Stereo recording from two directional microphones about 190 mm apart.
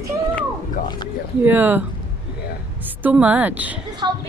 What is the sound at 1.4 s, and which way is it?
Speech, 10° right (ahead or behind).